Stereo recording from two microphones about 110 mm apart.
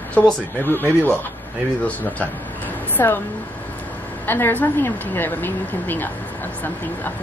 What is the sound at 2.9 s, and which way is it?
Speech, 20° left (ahead or behind).